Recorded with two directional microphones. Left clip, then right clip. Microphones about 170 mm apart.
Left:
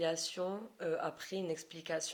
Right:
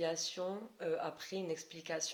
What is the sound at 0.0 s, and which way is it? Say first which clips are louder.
Speech: left 2 dB; 35° left (ahead or behind).